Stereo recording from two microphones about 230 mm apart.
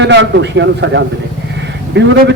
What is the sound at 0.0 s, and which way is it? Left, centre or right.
A man's voice, right.